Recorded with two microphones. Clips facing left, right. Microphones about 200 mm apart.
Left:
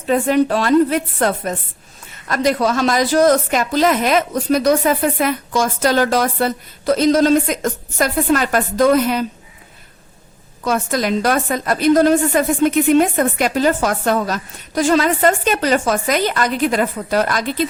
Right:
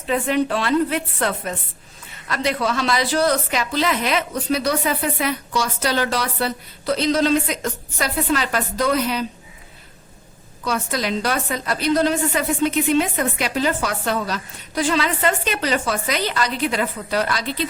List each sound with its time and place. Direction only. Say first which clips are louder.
0.1 s a woman's voice: left 5 dB; 40° left (ahead or behind)
10.6 s a woman's voice: left 5 dB; 50° left (ahead or behind)